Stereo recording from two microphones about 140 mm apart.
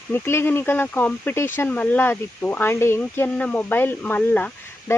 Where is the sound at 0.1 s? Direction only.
15° left (ahead or behind).